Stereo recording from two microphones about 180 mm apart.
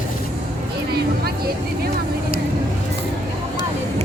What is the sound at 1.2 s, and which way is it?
Music, 55° right (ahead or behind).